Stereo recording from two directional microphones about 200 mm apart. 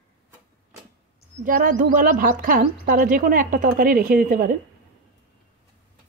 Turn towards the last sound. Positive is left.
turn(degrees=-40)  # may be behind; listen again after turning